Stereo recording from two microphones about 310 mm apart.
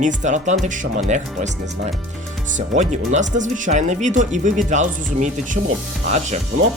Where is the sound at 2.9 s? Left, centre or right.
Right.